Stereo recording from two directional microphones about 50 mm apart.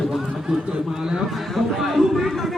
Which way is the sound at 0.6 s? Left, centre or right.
Right.